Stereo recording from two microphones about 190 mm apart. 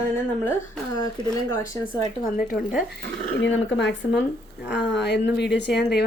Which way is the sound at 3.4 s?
70° left (ahead or behind).